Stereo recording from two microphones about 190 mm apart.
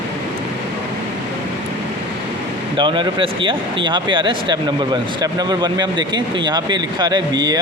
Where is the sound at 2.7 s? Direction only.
25° right (ahead or behind).